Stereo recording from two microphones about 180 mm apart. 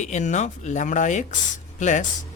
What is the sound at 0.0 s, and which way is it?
Speech, 40° left (ahead or behind).